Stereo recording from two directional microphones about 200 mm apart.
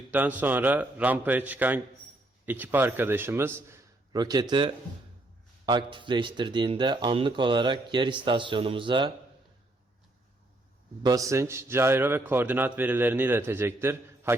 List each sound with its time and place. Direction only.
0.1 s a man's voice: 10° right (ahead or behind); by 9.1 s 25° right (ahead or behind)
11.0 s a man's voice: 15° right (ahead or behind)